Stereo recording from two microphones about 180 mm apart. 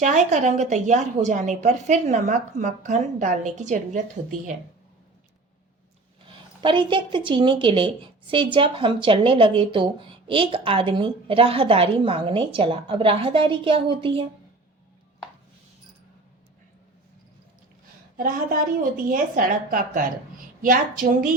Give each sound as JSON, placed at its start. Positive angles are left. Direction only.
{"t": 0.0, "sound": "a woman's voice", "side_deg": -40}
{"t": 6.2, "sound": "a woman's voice", "side_deg": -30}
{"t": 18.2, "sound": "a woman's voice", "side_deg": -50}